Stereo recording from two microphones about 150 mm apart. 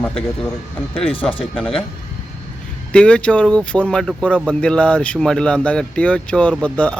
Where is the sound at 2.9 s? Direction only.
5° left (ahead or behind).